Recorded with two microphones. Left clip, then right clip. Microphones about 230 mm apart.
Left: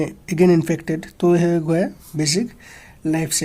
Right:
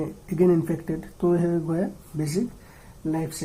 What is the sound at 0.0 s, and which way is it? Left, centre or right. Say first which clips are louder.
Speech: left 5 dB; left.